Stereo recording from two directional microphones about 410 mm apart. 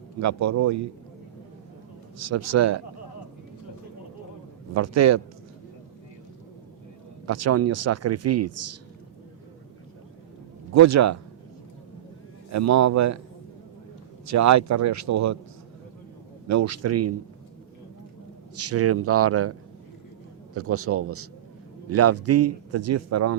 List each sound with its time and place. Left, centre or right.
0.2 s a man's voice: right
2.1 s a man's voice: right
4.7 s a man's voice: right
7.3 s a man's voice: right
10.8 s a man's voice: right
12.5 s a man's voice: right
14.3 s a man's voice: right
16.5 s a man's voice: right
18.5 s a man's voice: right